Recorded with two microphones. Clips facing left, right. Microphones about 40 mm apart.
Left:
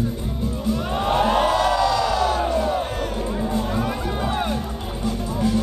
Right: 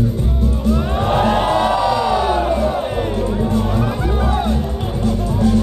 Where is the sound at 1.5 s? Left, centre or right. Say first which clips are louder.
Right 3 dB; right.